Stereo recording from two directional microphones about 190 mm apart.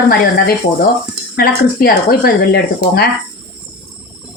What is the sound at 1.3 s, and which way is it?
Speech, 50° left (ahead or behind).